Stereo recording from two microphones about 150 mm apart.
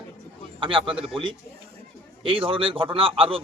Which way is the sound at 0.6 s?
35° right (ahead or behind).